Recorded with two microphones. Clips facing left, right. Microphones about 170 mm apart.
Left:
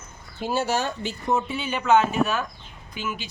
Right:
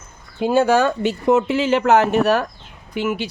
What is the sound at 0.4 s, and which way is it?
Speech, 55° right (ahead or behind).